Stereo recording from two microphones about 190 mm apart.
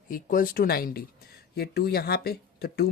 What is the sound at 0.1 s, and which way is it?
Speech, 45° left (ahead or behind).